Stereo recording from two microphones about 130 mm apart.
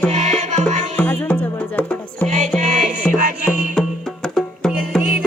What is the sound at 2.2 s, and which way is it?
Music, 60° right (ahead or behind).